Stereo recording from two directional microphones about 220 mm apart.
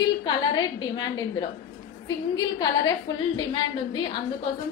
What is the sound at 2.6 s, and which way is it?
A woman's voice, 20° left (ahead or behind).